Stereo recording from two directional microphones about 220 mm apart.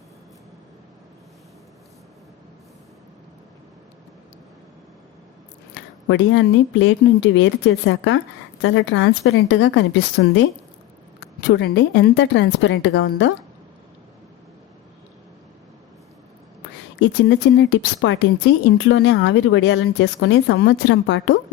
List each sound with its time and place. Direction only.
5.7 s speech: 55° left (ahead or behind)
17.0 s speech: 55° left (ahead or behind)